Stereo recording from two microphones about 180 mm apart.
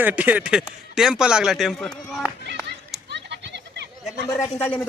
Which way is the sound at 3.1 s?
70° right (ahead or behind).